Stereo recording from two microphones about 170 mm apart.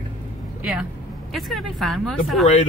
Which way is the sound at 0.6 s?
5° right (ahead or behind).